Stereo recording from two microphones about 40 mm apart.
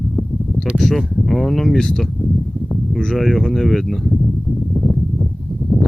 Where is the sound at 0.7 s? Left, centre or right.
Centre.